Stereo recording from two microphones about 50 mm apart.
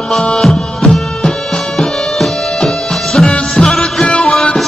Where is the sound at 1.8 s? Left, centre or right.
Centre.